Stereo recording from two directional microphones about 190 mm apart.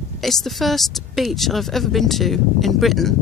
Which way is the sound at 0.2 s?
Centre (ahead or behind).